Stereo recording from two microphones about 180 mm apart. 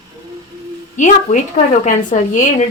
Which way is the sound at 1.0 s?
45° left (ahead or behind).